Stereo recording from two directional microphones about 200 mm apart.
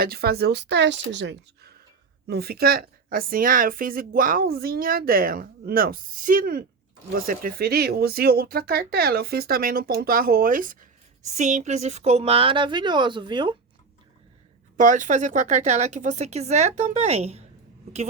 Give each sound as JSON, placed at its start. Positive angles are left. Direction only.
{"t": 0.0, "sound": "a woman's voice", "side_deg": -50}
{"t": 14.8, "sound": "speech", "side_deg": -40}